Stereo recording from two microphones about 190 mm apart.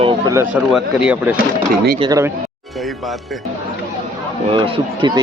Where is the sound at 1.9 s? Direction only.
25° right (ahead or behind).